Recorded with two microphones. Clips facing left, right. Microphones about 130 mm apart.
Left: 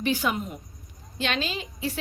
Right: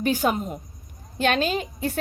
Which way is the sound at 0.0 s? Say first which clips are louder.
Right 4 dB; 45° right (ahead or behind).